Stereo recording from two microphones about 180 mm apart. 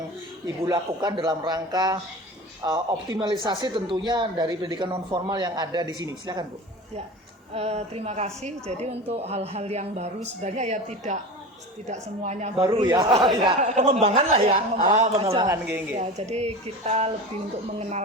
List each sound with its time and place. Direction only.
0.4 s speech: 20° right (ahead or behind)
7.5 s a woman's voice: 35° right (ahead or behind)
12.6 s speech: 25° right (ahead or behind)
13.6 s a woman's voice: 40° right (ahead or behind)
15.4 s speech: 10° right (ahead or behind)
16.3 s a woman's voice: 40° right (ahead or behind)